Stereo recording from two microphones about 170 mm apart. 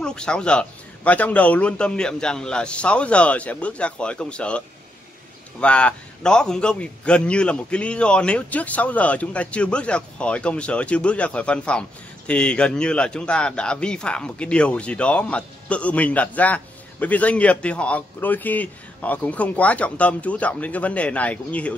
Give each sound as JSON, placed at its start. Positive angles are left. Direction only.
{"t": 0.0, "sound": "a man's voice", "side_deg": 5}